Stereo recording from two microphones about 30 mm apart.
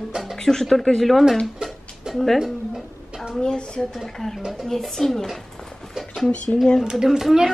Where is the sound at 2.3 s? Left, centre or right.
Centre.